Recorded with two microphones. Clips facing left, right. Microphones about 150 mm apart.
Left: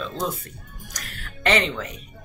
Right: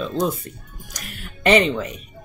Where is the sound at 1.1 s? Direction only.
15° right (ahead or behind).